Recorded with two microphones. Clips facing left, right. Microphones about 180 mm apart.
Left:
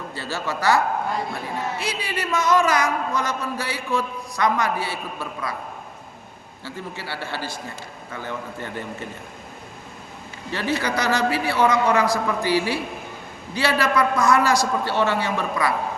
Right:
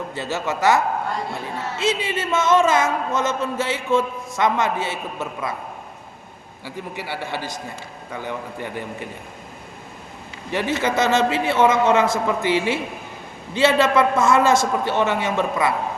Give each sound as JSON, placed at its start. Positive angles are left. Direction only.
{"t": 0.1, "sound": "speech", "side_deg": -20}
{"t": 1.8, "sound": "speech", "side_deg": -25}
{"t": 6.7, "sound": "a man's voice", "side_deg": -15}
{"t": 10.5, "sound": "speech", "side_deg": -20}